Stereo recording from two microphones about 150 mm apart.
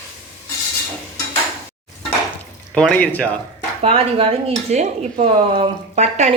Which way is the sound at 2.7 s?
5° left (ahead or behind).